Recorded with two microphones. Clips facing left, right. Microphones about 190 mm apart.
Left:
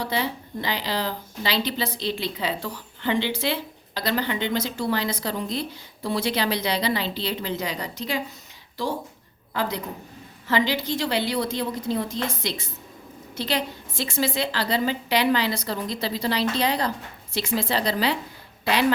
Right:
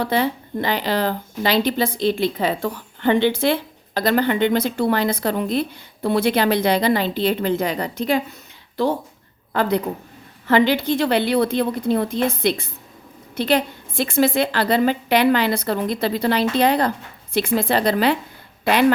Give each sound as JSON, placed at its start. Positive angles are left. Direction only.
{"t": 0.0, "sound": "a woman's voice", "side_deg": -55}